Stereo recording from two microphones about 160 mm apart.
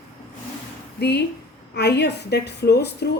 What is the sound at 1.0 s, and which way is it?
A woman's voice, 90° left.